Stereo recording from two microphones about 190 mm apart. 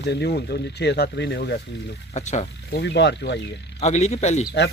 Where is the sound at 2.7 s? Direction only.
60° left (ahead or behind).